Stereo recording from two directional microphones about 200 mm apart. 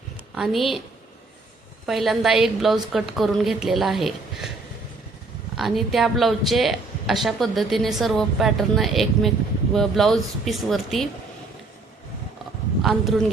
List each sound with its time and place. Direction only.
0.3 s a woman's voice: centre (ahead or behind)
1.9 s a woman's voice: centre (ahead or behind)
5.5 s a woman's voice: centre (ahead or behind)
12.8 s speech: centre (ahead or behind)